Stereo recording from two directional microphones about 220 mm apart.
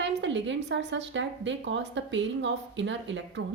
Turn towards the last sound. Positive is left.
turn(degrees=-55)  # may be behind; listen again after turning